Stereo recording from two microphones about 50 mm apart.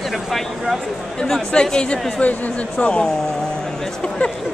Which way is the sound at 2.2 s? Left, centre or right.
Left.